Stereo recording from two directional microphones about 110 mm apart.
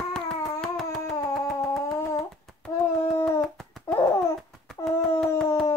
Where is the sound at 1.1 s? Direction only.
30° left (ahead or behind).